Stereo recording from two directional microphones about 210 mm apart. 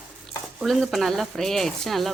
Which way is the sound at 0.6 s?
Centre (ahead or behind).